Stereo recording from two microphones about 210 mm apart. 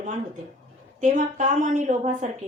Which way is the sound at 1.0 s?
35° right (ahead or behind).